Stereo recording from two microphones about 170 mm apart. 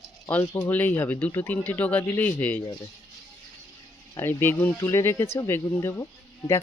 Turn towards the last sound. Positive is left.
turn(degrees=20)  # may be behind; listen again after turning